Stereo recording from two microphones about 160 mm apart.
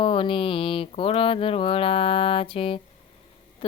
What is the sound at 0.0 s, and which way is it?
Speech, 35° left (ahead or behind).